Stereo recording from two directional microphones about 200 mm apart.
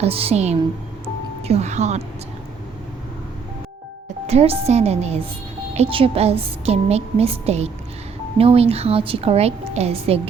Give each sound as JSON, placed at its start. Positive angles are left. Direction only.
{"t": 0.0, "sound": "a woman's voice", "side_deg": -30}
{"t": 4.3, "sound": "a woman's voice", "side_deg": -30}